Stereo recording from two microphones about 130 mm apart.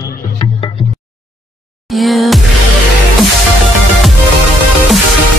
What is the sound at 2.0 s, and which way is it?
Music, centre (ahead or behind).